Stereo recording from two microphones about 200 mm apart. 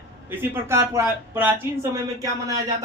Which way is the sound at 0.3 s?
10° right (ahead or behind).